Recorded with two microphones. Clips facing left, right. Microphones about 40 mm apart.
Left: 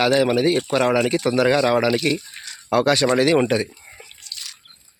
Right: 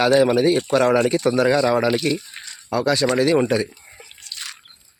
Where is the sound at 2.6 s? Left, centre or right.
Left.